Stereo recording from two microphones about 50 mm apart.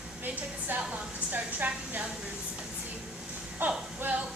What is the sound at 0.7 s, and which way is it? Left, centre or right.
A woman's voice, right.